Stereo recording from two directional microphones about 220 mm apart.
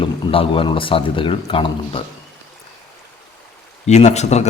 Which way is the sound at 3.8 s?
30° left (ahead or behind).